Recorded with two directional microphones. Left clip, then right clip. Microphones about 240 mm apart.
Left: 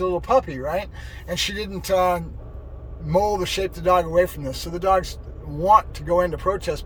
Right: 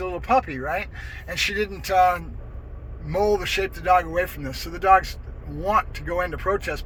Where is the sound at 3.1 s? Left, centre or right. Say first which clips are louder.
Left 1 dB; centre.